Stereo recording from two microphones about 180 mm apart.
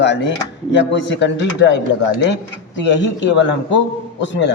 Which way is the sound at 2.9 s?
80° left.